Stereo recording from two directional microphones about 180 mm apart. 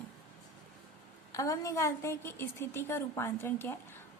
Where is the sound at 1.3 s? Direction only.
20° left (ahead or behind).